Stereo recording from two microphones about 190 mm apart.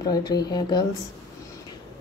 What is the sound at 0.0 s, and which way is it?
Speech, 20° left (ahead or behind).